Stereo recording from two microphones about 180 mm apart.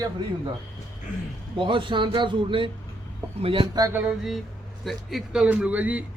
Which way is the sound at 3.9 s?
5° right (ahead or behind).